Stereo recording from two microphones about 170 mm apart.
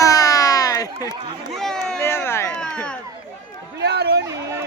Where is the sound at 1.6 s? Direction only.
5° left (ahead or behind).